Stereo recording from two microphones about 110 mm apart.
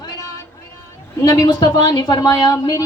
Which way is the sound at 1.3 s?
40° left (ahead or behind).